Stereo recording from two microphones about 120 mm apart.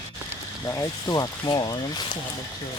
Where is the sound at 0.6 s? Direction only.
30° left (ahead or behind).